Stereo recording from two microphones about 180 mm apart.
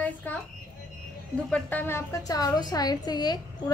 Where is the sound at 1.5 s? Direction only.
10° left (ahead or behind).